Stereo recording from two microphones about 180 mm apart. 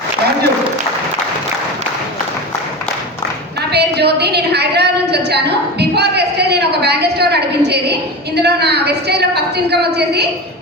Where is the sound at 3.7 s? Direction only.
65° right (ahead or behind).